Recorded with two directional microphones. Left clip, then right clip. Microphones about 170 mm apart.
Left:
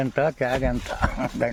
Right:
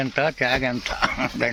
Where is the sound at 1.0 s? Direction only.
55° left (ahead or behind).